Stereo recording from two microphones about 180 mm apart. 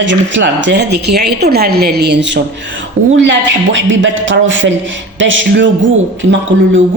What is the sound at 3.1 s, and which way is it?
Speech, 90° right.